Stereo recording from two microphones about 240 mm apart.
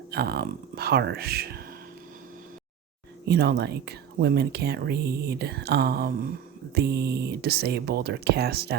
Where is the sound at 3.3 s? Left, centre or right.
Right.